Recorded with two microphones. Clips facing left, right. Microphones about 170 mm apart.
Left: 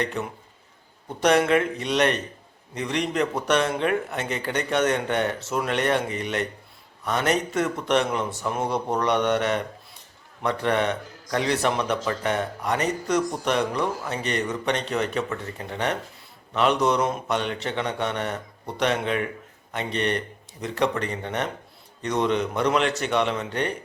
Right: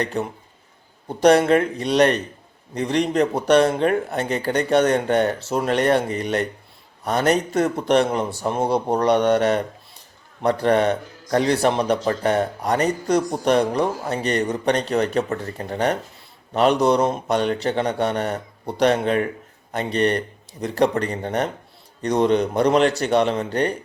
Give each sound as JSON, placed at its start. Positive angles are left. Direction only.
{"t": 0.0, "sound": "a man's voice", "side_deg": -35}